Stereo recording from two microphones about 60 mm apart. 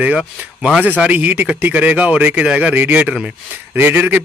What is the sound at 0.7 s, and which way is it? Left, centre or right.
Speech, right.